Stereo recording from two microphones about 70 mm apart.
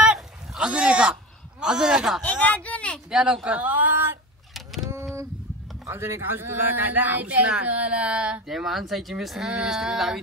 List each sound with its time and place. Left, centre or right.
0.0 s a sound: centre
1.6 s a man's voice: centre
2.2 s speech: left
3.1 s speech: centre
3.4 s speech: right
5.9 s speech: right; by 8.4 s centre
8.5 s a man's voice: centre